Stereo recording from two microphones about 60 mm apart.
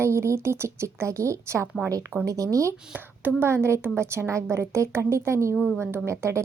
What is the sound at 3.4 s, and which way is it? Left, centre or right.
A woman's voice, right.